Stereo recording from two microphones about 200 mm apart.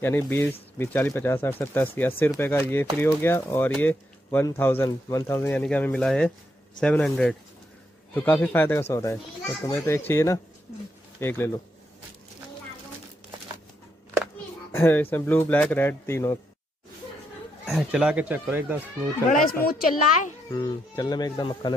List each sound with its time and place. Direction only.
0.0 s a man's voice: 10° left (ahead or behind)
14.7 s speech: 10° left (ahead or behind)
17.6 s speech: centre (ahead or behind)
19.3 s a woman's voice: 45° left (ahead or behind)
20.5 s speech: 20° left (ahead or behind)